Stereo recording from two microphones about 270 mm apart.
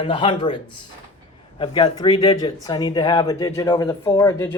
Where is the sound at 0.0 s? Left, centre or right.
Centre.